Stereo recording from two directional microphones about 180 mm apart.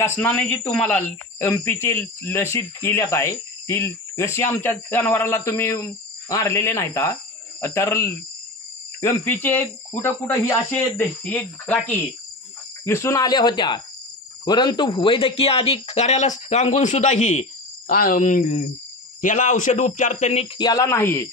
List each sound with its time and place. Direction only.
0.2 s a man's voice: 10° left (ahead or behind); by 20.4 s 40° left (ahead or behind)
20.5 s speech: 20° left (ahead or behind)